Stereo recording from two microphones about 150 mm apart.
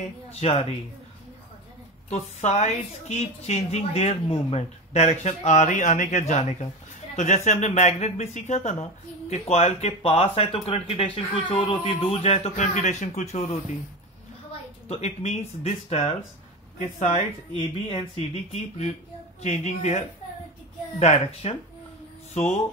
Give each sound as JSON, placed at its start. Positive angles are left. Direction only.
{"t": 0.0, "sound": "a woman's voice", "side_deg": 45}
{"t": 2.0, "sound": "a woman's voice", "side_deg": 50}
{"t": 14.9, "sound": "a woman's voice", "side_deg": 45}
{"t": 17.6, "sound": "a woman's voice", "side_deg": 40}